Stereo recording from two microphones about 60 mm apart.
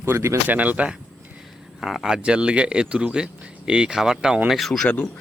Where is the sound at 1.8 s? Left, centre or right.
Centre.